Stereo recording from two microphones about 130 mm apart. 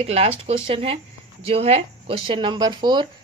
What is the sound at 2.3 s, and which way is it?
Speech, 40° right (ahead or behind).